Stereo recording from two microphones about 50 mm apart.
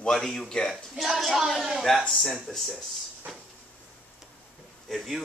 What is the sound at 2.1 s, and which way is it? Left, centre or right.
Speech, centre.